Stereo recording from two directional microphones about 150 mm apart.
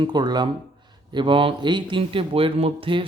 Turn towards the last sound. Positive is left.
turn(degrees=-35)  # may be behind; listen again after turning